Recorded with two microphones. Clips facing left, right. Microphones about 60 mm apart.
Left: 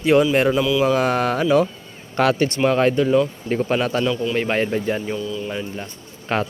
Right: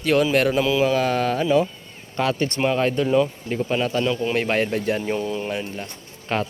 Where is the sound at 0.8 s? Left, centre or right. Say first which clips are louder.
Left 2 dB; left.